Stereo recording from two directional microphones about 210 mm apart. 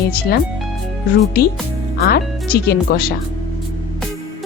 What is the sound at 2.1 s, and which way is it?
Speech, 45° left (ahead or behind).